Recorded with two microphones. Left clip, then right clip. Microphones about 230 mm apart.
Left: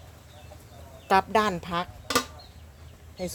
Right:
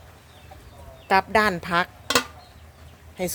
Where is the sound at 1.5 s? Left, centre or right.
Centre.